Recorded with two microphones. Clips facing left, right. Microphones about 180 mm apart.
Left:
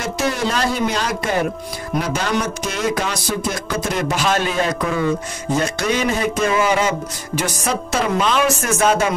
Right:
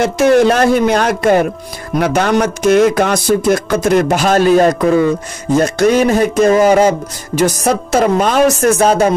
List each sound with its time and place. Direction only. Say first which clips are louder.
0.0 s speech: right 12 dB; 60° right (ahead or behind)
2.0 s music: right 8 dB; 60° right (ahead or behind); by 9.1 s 35° right (ahead or behind)